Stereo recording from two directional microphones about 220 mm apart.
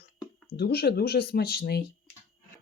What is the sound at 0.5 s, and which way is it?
Speech, 45° left (ahead or behind).